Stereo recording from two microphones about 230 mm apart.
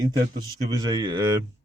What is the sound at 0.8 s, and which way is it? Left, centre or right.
Speech, centre.